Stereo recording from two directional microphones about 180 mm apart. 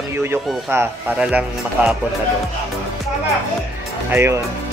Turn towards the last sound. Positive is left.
turn(degrees=-15)  # may be behind; listen again after turning